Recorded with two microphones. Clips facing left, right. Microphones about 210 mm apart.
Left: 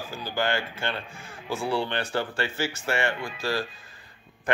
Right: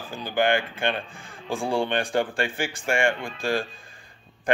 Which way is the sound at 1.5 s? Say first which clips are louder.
Right 2 dB; 50° right (ahead or behind).